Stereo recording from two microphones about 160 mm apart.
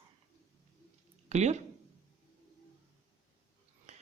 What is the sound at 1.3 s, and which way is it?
Speech, 45° right (ahead or behind).